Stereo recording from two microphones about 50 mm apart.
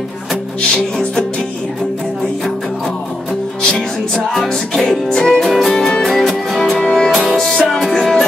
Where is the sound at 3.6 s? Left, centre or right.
Centre.